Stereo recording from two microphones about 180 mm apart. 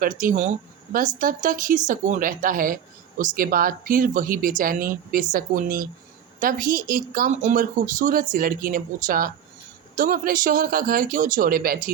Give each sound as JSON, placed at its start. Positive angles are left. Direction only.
{"t": 0.0, "sound": "speech", "side_deg": -50}